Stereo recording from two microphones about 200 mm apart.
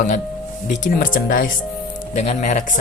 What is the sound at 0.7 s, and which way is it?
Speech, 40° left (ahead or behind).